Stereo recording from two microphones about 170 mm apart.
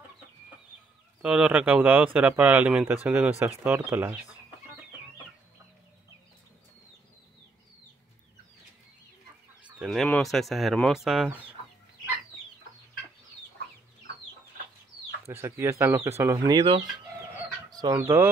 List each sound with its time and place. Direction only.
1.2 s speech: 5° right (ahead or behind)
9.8 s speech: centre (ahead or behind)
15.2 s speech: 15° right (ahead or behind)